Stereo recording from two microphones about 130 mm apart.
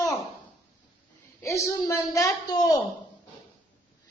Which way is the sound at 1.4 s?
25° left (ahead or behind).